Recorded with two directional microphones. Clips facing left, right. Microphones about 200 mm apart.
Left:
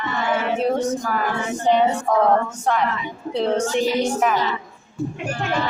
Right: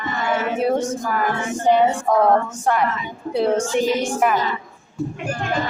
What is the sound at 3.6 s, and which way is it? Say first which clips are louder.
Speech: even; 50° right (ahead or behind).